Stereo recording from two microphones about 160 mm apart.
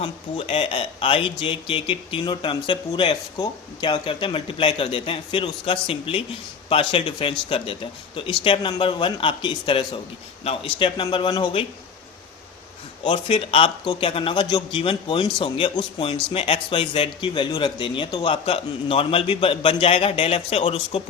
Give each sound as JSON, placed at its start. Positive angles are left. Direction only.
{"t": 0.0, "sound": "speech", "side_deg": 35}
{"t": 13.1, "sound": "speech", "side_deg": 35}